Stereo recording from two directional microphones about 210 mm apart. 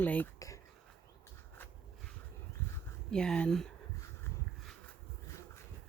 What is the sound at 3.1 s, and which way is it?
Speech, 5° left (ahead or behind).